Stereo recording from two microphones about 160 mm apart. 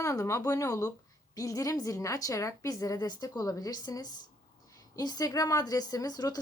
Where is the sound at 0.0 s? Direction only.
20° left (ahead or behind).